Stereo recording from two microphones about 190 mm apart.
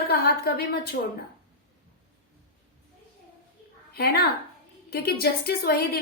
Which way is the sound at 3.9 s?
55° left (ahead or behind).